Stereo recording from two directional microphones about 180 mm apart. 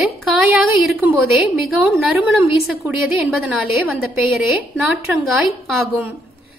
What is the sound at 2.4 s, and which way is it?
Speech, 15° right (ahead or behind).